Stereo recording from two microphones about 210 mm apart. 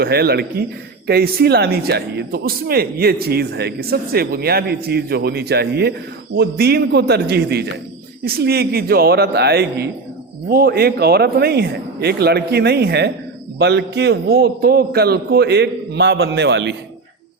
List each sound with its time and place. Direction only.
0.0 s speech: 50° right (ahead or behind)